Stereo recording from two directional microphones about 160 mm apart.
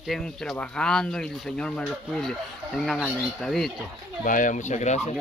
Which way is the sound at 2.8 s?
Centre (ahead or behind).